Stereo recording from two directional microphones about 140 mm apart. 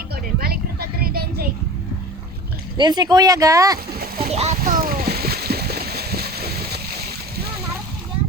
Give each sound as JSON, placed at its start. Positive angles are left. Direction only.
{"t": 0.3, "sound": "a sound", "side_deg": -90}
{"t": 2.7, "sound": "speech", "side_deg": -30}
{"t": 4.3, "sound": "a child's voice", "side_deg": -50}
{"t": 4.6, "sound": "splash", "side_deg": -85}